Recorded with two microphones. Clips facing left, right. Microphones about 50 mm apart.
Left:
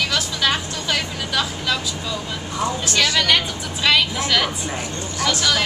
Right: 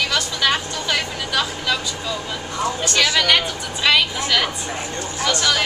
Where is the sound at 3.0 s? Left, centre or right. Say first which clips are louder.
Right 1 dB; centre.